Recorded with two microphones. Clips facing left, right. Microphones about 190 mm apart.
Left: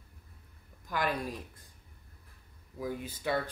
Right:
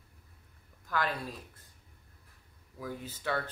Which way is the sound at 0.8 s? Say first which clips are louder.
Left 1 dB; 15° left (ahead or behind).